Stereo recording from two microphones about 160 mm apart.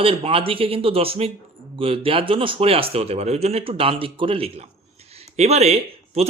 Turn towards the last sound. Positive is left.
turn(degrees=-40)  # may be behind; listen again after turning